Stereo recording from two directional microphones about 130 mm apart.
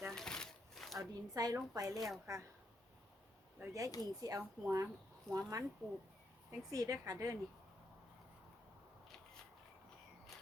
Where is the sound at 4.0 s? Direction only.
30° right (ahead or behind).